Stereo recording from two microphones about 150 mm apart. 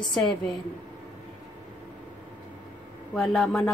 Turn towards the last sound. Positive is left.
turn(degrees=5)  # may be behind; listen again after turning